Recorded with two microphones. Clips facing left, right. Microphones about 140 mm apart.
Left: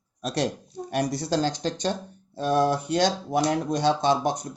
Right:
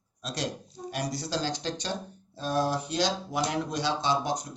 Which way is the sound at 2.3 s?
60° left (ahead or behind).